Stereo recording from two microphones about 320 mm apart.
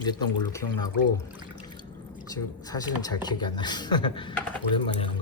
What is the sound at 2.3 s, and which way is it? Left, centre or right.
Speech, centre.